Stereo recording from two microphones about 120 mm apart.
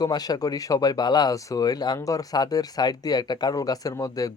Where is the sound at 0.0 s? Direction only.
35° left (ahead or behind).